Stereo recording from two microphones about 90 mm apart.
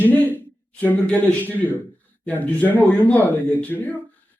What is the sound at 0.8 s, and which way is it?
A man's voice, 15° left (ahead or behind).